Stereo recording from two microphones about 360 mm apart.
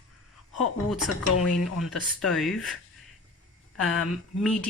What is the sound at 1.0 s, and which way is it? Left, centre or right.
Speech, left.